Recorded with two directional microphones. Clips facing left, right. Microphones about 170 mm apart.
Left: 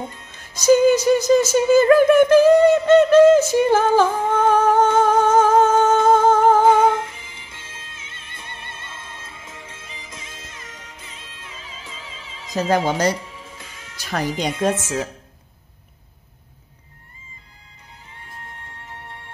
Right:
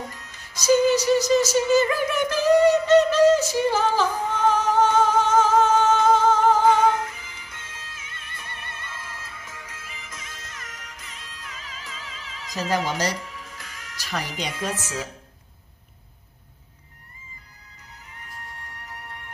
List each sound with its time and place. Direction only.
0.0 s music: 25° left (ahead or behind)
0.8 s music: 50° left (ahead or behind)
4.4 s humming: 55° left (ahead or behind)
6.6 s music: 25° left (ahead or behind)
12.5 s speech: 55° left (ahead or behind)
13.3 s music: 25° left (ahead or behind)
14.0 s music: 50° left (ahead or behind)
14.7 s speech: 25° left (ahead or behind)
18.2 s music: 25° left (ahead or behind)